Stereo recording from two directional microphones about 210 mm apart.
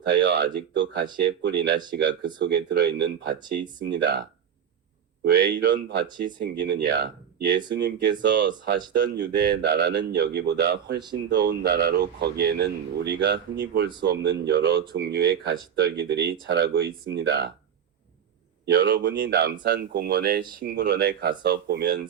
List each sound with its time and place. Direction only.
0.0 s speech: 55° right (ahead or behind)
8.2 s speech: 55° right (ahead or behind)
18.6 s speech: 55° right (ahead or behind)